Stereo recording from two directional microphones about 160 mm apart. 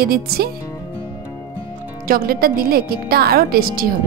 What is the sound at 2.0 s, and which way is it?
A woman's voice, 65° right (ahead or behind).